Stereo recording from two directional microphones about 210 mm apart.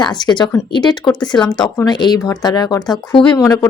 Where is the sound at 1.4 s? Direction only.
5° left (ahead or behind).